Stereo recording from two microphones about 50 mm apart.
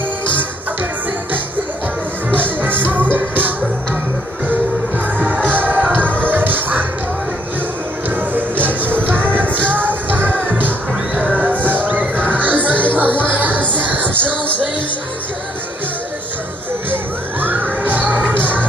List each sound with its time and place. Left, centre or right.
2.3 s music: right
8.2 s music: right
16.9 s music: right